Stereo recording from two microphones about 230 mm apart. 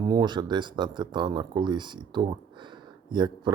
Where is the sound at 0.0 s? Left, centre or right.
Centre.